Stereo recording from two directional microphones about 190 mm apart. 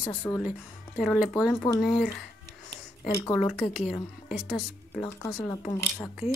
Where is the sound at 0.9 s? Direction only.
Centre (ahead or behind).